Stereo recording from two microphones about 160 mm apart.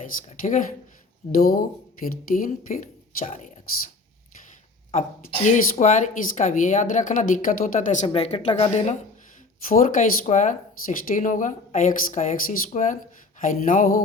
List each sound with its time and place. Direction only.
0.0 s speech: 55° left (ahead or behind)
1.4 s speech: 65° left (ahead or behind)
5.5 s speech: 45° left (ahead or behind)
8.0 s a woman's voice: 40° left (ahead or behind)
9.6 s speech: 55° left (ahead or behind)
13.4 s a sound: 60° left (ahead or behind)